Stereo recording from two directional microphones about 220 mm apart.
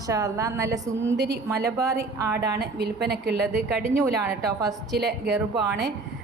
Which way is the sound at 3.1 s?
45° right (ahead or behind).